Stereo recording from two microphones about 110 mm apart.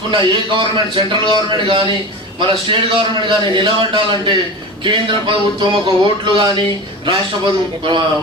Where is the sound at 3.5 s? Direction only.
50° right (ahead or behind).